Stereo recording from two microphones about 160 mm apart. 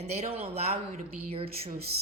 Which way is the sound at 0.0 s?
40° right (ahead or behind).